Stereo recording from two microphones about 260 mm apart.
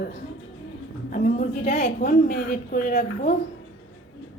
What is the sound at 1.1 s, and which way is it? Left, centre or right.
A woman's voice, left.